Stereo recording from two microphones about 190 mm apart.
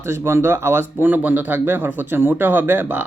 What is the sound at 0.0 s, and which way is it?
Speech, 15° right (ahead or behind).